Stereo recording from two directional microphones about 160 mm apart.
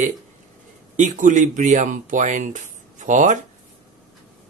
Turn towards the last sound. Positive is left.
turn(degrees=-50)  # may be behind; listen again after turning